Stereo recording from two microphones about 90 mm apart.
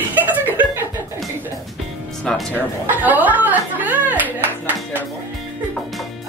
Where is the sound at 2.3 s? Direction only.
5° left (ahead or behind).